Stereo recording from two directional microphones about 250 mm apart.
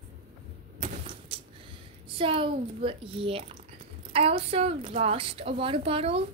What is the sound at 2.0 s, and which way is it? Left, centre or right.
A woman's voice, right.